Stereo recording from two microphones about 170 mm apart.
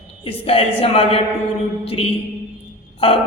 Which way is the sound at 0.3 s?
35° left (ahead or behind).